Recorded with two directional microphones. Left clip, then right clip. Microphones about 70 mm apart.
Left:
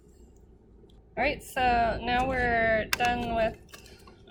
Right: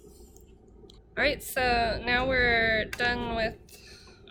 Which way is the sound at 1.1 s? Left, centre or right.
Right.